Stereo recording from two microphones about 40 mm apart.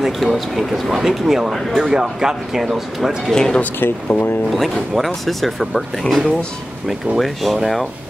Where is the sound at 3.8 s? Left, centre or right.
Left.